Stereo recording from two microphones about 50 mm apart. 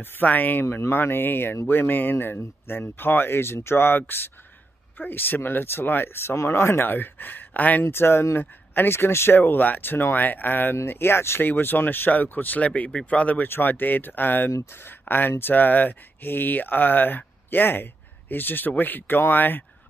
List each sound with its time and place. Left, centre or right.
0.0 s speech: left
0.7 s speech: left
6.3 s speech: left
7.8 s speech: left
9.4 s speech: left
11.4 s speech: left
13.5 s speech: left